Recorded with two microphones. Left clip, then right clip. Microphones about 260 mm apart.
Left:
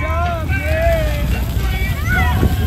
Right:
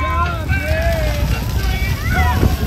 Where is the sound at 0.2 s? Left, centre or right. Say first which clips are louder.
Even; right.